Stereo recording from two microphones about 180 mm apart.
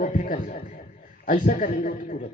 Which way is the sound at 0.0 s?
45° left (ahead or behind).